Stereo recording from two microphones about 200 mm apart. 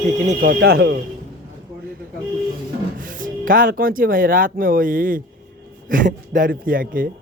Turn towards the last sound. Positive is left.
turn(degrees=-45)  # may be behind; listen again after turning